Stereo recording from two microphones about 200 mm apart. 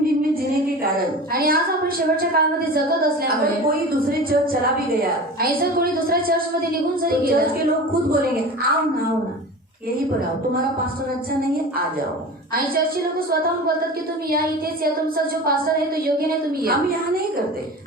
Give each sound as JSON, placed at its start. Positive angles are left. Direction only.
{"t": 1.3, "sound": "a woman's voice", "side_deg": -45}
{"t": 5.4, "sound": "a woman's voice", "side_deg": -50}
{"t": 15.4, "sound": "a woman's voice", "side_deg": -45}